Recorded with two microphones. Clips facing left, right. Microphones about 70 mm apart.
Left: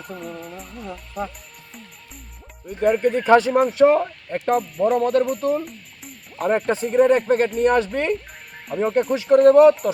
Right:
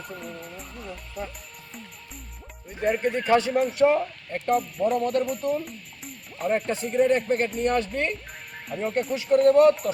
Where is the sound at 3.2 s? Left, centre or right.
Left.